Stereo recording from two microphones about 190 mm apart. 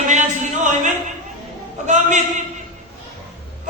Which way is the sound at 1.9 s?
40° right (ahead or behind).